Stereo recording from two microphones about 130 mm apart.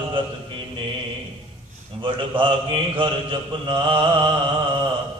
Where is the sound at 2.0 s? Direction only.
40° right (ahead or behind).